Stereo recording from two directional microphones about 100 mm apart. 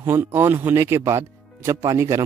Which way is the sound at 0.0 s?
25° right (ahead or behind).